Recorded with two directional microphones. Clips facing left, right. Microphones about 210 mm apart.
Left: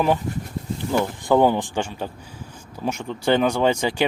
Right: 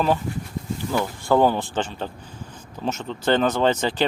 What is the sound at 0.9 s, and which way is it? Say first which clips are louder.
Speech: left 2 dB; 15° left (ahead or behind).